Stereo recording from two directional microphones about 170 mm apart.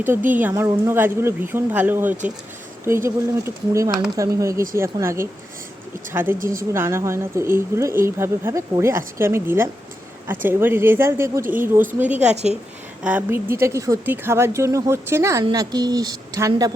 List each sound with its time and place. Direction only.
0.0 s speech: 10° right (ahead or behind)
6.4 s a woman's voice: 55° right (ahead or behind)
6.7 s speech: 15° right (ahead or behind)
12.3 s a woman's voice: 40° right (ahead or behind)
13.0 s speech: 10° right (ahead or behind)